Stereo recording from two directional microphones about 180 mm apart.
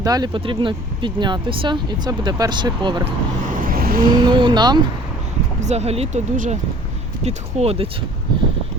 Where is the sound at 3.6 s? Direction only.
55° right (ahead or behind).